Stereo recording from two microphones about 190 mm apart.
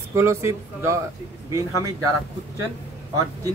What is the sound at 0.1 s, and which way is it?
Speech, 15° right (ahead or behind).